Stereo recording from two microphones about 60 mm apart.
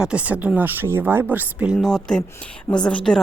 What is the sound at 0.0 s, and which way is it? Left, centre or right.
Speech, right.